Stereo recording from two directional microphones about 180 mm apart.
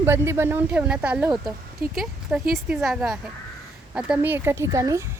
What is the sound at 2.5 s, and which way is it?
A woman's voice, centre (ahead or behind).